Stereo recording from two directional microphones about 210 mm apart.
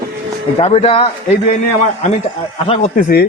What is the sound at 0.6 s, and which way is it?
Speech, 30° left (ahead or behind).